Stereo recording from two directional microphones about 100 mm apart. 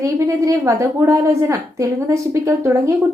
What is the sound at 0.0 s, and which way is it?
A woman's voice, 30° right (ahead or behind).